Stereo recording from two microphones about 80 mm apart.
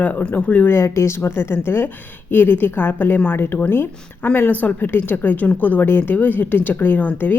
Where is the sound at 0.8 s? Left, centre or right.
Left.